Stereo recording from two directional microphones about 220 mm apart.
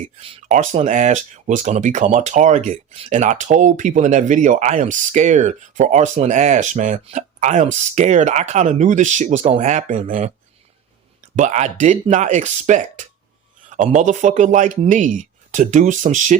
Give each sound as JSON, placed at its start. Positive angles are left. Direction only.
{"t": 0.4, "sound": "speech", "side_deg": -35}
{"t": 11.3, "sound": "speech", "side_deg": -30}